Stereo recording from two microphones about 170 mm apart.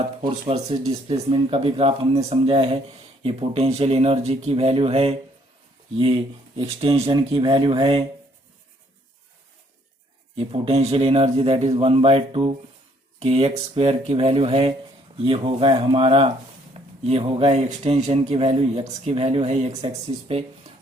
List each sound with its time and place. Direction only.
0.4 s speech: 40° right (ahead or behind)
6.6 s speech: 35° right (ahead or behind)
10.3 s speech: 35° right (ahead or behind)
19.7 s speech: 20° right (ahead or behind)